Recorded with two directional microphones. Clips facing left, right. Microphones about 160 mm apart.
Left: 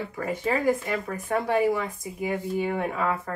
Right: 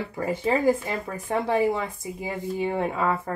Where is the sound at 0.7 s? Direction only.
25° right (ahead or behind).